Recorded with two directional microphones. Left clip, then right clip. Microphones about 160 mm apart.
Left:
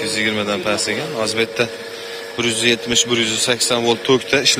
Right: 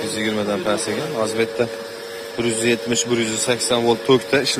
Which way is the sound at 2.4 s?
25° right (ahead or behind).